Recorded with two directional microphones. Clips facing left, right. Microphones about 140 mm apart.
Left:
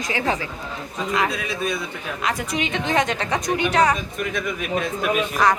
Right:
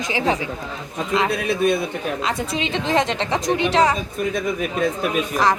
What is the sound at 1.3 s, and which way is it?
Speech, 60° right (ahead or behind).